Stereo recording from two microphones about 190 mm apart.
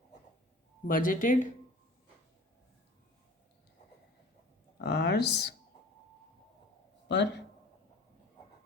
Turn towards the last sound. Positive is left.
turn(degrees=65)  # may be behind; listen again after turning